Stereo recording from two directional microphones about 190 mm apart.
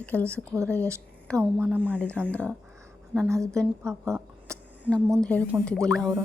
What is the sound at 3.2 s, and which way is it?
Speech, 15° right (ahead or behind).